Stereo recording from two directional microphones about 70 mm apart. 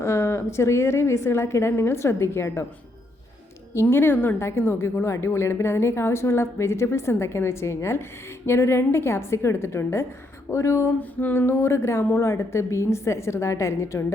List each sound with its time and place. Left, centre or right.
0.0 s a woman's voice: left
3.8 s a woman's voice: left
11.2 s a sound: left
11.4 s a woman's voice: left